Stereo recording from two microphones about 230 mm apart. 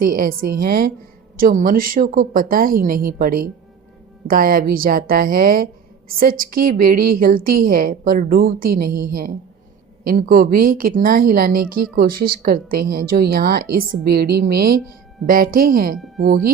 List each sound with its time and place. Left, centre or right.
0.0 s a woman's voice: right